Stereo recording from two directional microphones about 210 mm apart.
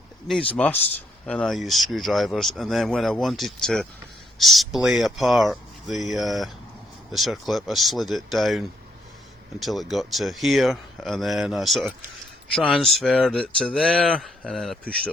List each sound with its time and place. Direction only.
0.3 s speech: 5° left (ahead or behind)